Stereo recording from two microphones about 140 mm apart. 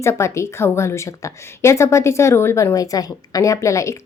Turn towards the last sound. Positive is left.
turn(degrees=20)  # may be behind; listen again after turning